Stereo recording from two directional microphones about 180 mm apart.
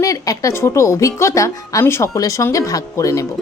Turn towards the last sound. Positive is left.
turn(degrees=15)  # may be behind; listen again after turning